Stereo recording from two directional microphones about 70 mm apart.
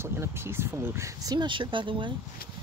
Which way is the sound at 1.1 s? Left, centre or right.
Right.